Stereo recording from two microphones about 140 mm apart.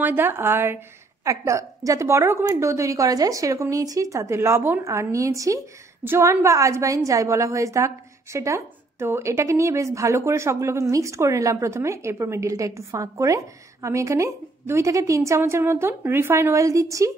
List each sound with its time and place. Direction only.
0.0 s a woman's voice: 15° right (ahead or behind)